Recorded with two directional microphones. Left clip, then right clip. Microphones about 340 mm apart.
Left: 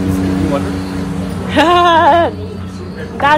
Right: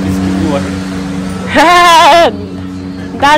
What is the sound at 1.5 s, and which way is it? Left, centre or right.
Sheep, centre.